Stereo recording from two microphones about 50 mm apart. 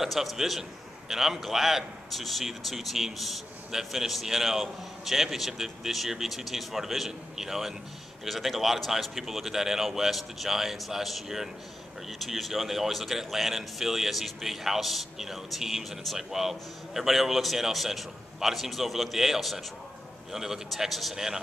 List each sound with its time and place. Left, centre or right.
0.0 s a man's voice: centre